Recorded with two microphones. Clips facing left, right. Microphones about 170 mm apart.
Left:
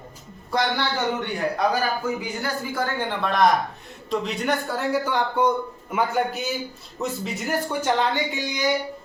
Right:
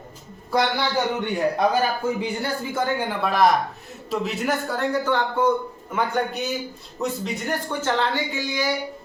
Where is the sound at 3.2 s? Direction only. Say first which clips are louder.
Even; 5° right (ahead or behind).